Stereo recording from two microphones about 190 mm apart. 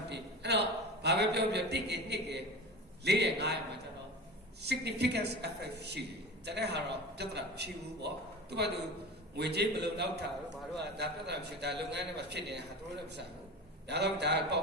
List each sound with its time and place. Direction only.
0.1 s a man's voice: 60° right (ahead or behind)
13.8 s a woman's voice: 65° right (ahead or behind)